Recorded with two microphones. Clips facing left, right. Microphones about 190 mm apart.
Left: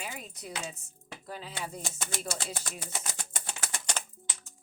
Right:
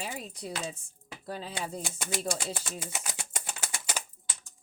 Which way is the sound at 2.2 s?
10° right (ahead or behind).